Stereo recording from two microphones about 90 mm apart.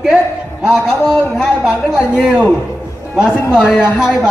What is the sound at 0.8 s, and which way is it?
A man's voice, 5° right (ahead or behind).